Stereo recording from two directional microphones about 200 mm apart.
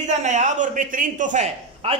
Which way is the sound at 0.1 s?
35° right (ahead or behind).